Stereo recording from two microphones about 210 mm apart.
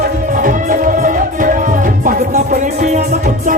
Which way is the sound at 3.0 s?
50° right (ahead or behind).